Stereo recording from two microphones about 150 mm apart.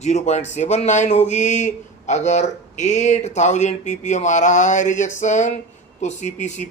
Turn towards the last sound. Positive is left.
turn(degrees=50)  # may be behind; listen again after turning